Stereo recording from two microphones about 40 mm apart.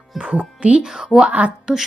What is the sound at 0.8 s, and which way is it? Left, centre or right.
Speech, centre.